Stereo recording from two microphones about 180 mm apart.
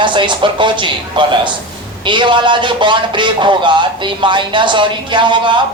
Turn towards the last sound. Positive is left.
turn(degrees=-25)  # may be behind; listen again after turning